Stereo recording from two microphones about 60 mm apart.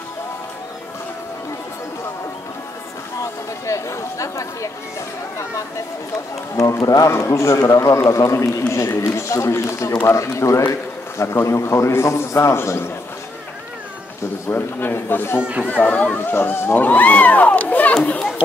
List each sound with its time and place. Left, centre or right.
3.2 s speech: left
6.8 s speech: left
7.1 s speech: left
8.1 s a man's voice: left
14.5 s a man's voice: left